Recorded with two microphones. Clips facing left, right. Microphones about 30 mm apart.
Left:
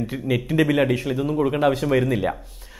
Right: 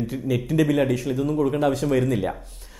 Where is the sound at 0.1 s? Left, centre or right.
Left.